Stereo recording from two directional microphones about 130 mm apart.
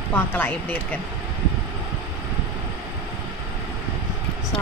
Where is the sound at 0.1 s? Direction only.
15° left (ahead or behind).